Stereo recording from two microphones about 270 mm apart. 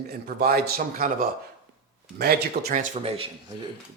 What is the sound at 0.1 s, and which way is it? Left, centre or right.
A man's voice, right.